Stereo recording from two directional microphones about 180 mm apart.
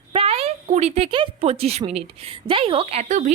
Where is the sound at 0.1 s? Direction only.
30° right (ahead or behind).